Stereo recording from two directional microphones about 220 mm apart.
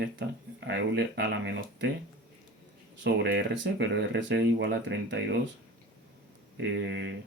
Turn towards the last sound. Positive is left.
turn(degrees=-50)  # may be behind; listen again after turning